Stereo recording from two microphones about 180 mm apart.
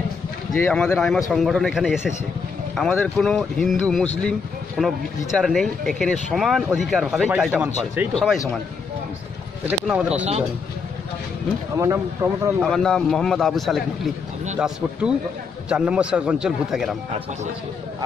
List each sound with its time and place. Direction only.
0.5 s speech: 5° left (ahead or behind)
7.5 s speech: 10° right (ahead or behind)
8.1 s speech: 5° left (ahead or behind)
9.7 s speech: 5° right (ahead or behind)
11.8 s speech: 15° right (ahead or behind)
12.6 s speech: 5° left (ahead or behind)
15.7 s speech: 5° right (ahead or behind)